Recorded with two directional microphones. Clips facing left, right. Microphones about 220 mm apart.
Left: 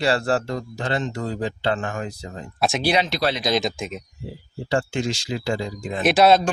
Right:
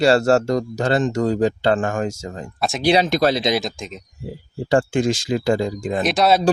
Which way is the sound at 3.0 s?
45° right (ahead or behind).